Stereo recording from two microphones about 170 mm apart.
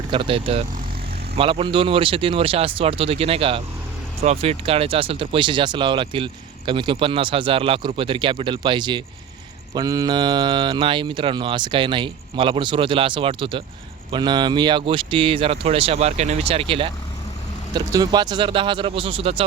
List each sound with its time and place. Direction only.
0.1 s speech: 30° right (ahead or behind)